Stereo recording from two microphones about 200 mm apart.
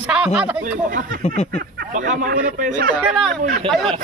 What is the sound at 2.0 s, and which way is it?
Speech, 40° right (ahead or behind).